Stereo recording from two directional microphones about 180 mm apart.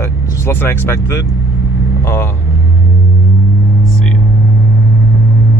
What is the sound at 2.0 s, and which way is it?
Vehicle, 15° left (ahead or behind).